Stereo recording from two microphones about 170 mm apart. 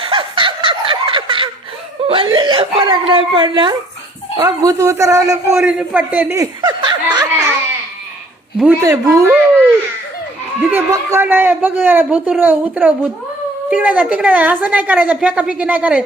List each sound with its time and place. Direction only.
0.0 s snicker: 30° right (ahead or behind)
2.0 s a man's voice: 30° right (ahead or behind)
5.5 s speech: 10° right (ahead or behind); by 7.3 s 25° right (ahead or behind)
8.8 s a man's voice: 20° right (ahead or behind)
10.7 s a man's voice: 15° right (ahead or behind)